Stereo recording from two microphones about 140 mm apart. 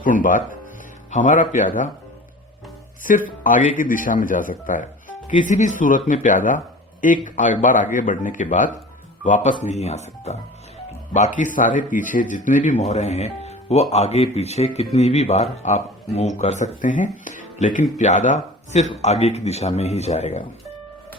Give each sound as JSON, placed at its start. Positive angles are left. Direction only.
{"t": 0.0, "sound": "speech", "side_deg": 75}
{"t": 3.0, "sound": "speech", "side_deg": 75}
{"t": 9.6, "sound": "a man's voice", "side_deg": 50}
{"t": 11.3, "sound": "speech", "side_deg": 70}
{"t": 12.8, "sound": "a man's voice", "side_deg": 50}